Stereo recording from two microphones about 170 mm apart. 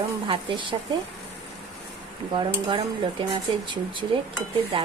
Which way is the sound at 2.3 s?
30° right (ahead or behind).